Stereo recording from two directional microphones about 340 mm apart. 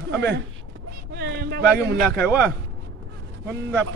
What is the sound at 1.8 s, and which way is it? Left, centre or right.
Speech, centre.